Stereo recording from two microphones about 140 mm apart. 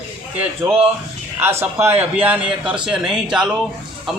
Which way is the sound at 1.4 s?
15° right (ahead or behind).